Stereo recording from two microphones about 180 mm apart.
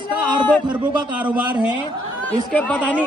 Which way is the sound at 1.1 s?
10° right (ahead or behind).